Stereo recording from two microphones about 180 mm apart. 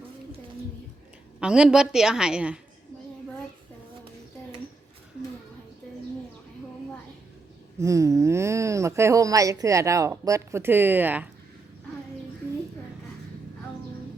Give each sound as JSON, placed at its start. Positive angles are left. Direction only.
{"t": 1.4, "sound": "a woman's voice", "side_deg": -5}
{"t": 7.8, "sound": "speech", "side_deg": -15}